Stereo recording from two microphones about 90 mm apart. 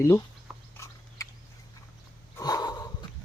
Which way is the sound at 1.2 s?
40° left (ahead or behind).